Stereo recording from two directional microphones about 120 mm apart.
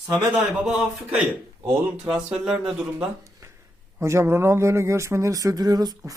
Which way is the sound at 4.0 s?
25° right (ahead or behind).